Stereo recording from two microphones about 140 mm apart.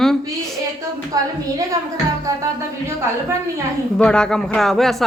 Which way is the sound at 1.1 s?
25° right (ahead or behind).